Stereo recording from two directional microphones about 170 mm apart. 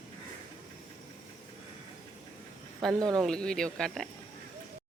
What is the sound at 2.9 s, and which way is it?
Speech, 20° right (ahead or behind).